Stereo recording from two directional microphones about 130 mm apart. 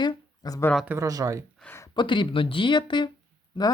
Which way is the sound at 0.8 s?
25° right (ahead or behind).